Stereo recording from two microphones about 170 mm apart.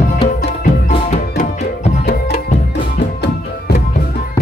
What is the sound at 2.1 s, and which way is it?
Music, 70° left (ahead or behind).